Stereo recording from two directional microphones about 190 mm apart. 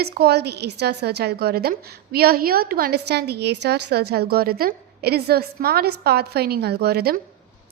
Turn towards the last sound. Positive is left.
turn(degrees=-55)  # may be behind; listen again after turning